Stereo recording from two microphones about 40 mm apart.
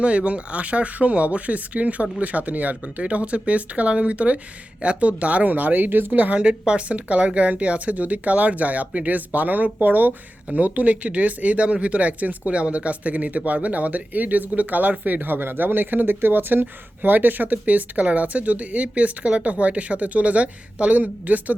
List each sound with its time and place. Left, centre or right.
0.0 s a woman's voice: right
6.1 s a woman's voice: right
17.0 s a woman's voice: right